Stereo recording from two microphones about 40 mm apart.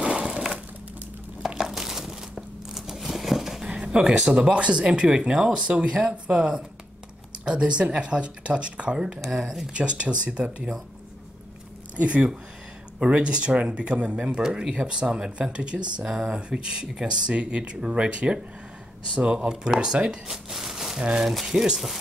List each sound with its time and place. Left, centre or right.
0.2 s a sound: centre
1.6 s a sound: centre
3.6 s speech: right
9.8 s speech: right
12.0 s speech: right
14.7 s speech: right